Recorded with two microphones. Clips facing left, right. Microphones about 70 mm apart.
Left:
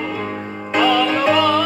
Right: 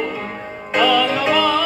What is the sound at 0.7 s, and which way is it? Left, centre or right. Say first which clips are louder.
Music: even; centre.